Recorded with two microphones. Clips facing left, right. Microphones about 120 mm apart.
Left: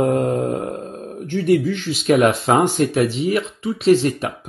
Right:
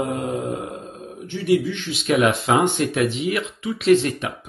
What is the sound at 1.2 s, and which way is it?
Speech, 45° left (ahead or behind).